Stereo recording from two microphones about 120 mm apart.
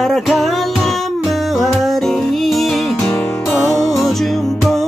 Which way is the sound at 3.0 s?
20° left (ahead or behind).